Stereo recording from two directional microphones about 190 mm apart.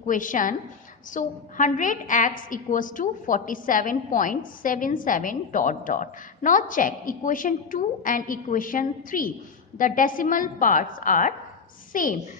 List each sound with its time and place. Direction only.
0.0 s a woman's voice: 45° left (ahead or behind)